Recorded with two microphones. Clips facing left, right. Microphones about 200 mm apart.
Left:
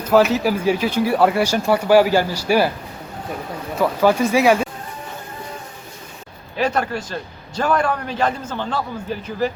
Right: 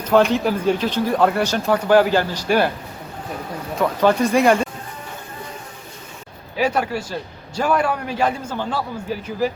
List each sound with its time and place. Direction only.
0.0 s speech: 5° left (ahead or behind)
3.8 s speech: 5° left (ahead or behind)
6.6 s a man's voice: 10° right (ahead or behind)